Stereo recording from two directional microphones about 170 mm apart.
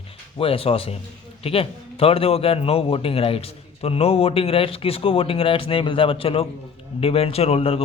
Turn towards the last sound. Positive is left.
turn(degrees=35)  # may be behind; listen again after turning